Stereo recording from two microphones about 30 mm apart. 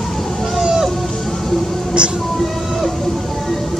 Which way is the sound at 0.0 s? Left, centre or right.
Centre.